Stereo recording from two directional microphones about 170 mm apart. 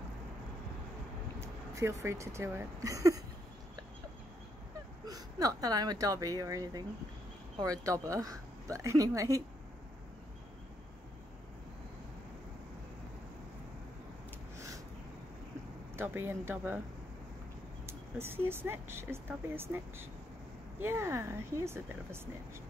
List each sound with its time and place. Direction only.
1.8 s speech: 15° right (ahead or behind)
5.0 s speech: 20° right (ahead or behind)
16.0 s speech: 15° right (ahead or behind)
17.8 s speech: 15° right (ahead or behind)